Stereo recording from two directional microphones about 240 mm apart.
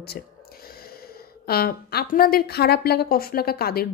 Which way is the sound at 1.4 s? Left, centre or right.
Left.